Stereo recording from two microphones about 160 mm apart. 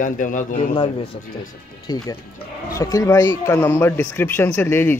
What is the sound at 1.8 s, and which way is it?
Speech, 25° left (ahead or behind).